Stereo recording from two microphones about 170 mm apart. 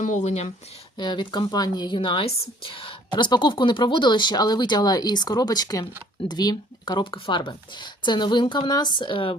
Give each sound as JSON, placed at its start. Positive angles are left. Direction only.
{"t": 0.0, "sound": "speech", "side_deg": 45}
{"t": 0.9, "sound": "speech", "side_deg": 25}